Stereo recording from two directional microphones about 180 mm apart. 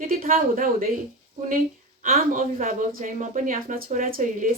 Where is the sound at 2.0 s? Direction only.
45° right (ahead or behind).